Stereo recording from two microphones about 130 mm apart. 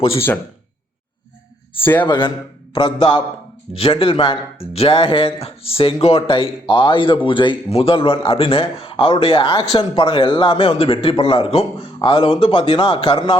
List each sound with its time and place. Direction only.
1.8 s speech: 15° left (ahead or behind)
2.0 s a man's voice: 35° left (ahead or behind)